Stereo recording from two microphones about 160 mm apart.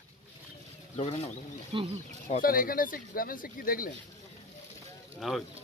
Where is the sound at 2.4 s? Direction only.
65° left (ahead or behind).